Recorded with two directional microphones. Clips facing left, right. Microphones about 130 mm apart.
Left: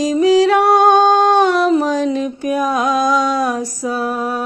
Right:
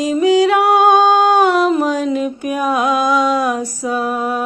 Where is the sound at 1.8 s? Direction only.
35° left (ahead or behind).